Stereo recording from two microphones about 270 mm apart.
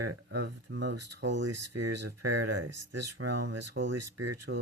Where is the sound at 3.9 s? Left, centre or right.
Right.